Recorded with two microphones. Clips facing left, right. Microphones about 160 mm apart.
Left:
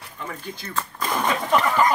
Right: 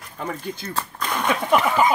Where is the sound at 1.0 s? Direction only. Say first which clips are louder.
Left 1 dB; centre (ahead or behind).